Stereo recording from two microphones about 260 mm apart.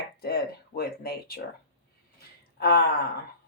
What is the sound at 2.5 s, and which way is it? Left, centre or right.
Speech, left.